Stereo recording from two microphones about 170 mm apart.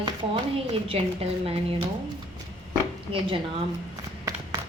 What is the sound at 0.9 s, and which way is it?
Speech, 35° right (ahead or behind).